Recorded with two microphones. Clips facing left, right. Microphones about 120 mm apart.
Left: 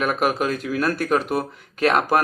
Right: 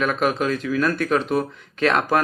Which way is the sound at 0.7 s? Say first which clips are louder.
Even; 10° left (ahead or behind).